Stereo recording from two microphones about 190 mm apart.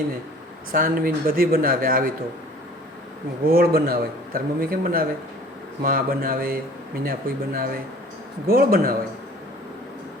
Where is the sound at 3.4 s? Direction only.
50° right (ahead or behind).